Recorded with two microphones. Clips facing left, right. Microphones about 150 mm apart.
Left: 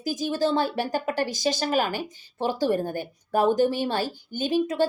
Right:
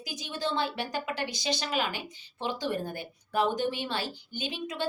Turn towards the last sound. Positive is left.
turn(degrees=45)  # may be behind; listen again after turning